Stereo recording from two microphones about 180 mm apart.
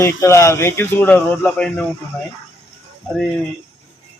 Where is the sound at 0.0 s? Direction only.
15° left (ahead or behind).